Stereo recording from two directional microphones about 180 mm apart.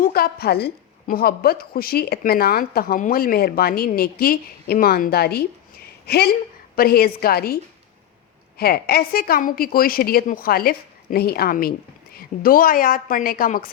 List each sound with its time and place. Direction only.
0.0 s a woman's voice: 55° left (ahead or behind)